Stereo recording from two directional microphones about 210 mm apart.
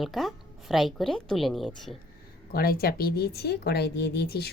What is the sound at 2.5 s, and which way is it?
Speech, 45° left (ahead or behind).